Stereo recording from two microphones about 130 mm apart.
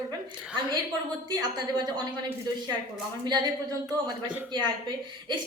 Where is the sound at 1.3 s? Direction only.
30° right (ahead or behind).